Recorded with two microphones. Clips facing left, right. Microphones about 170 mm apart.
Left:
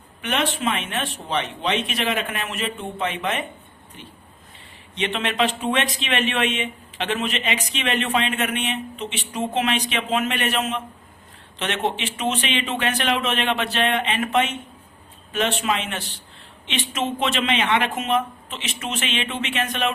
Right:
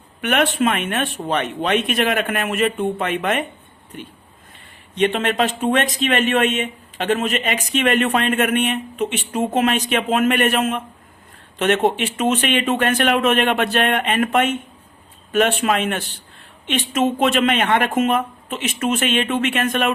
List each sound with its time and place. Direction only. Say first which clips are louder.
0.2 s speech: right 6 dB; 55° right (ahead or behind)
4.9 s speech: right 5 dB; 45° right (ahead or behind)